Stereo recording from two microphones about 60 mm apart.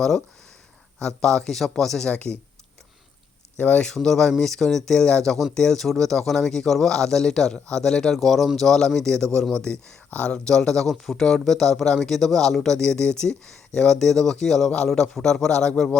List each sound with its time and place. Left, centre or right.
0.9 s speech: centre
2.0 s speech: left
3.6 s speech: left
3.8 s speech: centre